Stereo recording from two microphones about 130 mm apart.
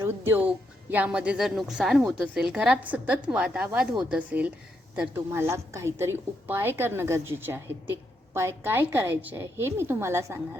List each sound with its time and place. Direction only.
0.0 s a woman's voice: 15° right (ahead or behind)